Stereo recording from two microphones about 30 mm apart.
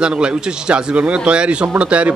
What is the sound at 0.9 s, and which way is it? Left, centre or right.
A man's voice, right.